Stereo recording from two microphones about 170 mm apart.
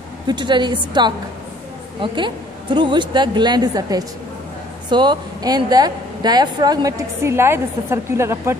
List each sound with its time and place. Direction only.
0.3 s a woman's voice: 25° right (ahead or behind)